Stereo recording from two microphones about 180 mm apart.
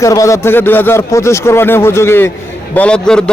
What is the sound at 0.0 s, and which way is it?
A man's voice, 15° left (ahead or behind).